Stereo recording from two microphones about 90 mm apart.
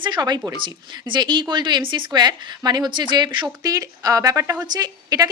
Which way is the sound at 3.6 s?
40° right (ahead or behind).